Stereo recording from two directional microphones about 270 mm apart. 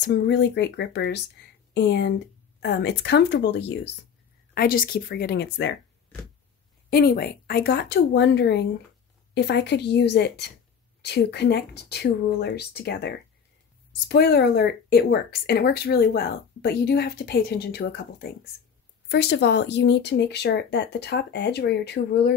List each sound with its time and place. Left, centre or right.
0.0 s speech: left
6.9 s speech: left